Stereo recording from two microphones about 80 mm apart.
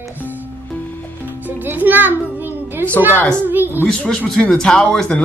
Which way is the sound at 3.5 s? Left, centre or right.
Right.